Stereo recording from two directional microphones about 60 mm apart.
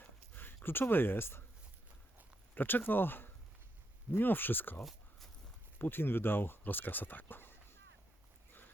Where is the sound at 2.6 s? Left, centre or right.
Left.